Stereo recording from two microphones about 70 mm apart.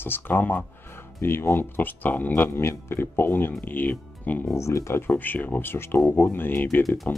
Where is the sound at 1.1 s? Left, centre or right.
Left.